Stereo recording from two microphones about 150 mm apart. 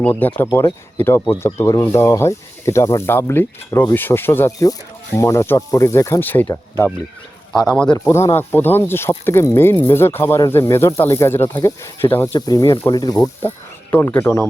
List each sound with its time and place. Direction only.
0.0 s speech: 10° left (ahead or behind)
8.0 s speech: 20° left (ahead or behind)
13.9 s speech: 15° left (ahead or behind)